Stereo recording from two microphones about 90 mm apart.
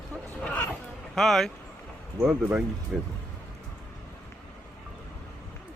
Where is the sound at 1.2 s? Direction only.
5° left (ahead or behind).